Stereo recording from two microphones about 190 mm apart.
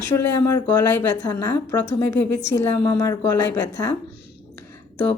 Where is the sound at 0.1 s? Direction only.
15° left (ahead or behind).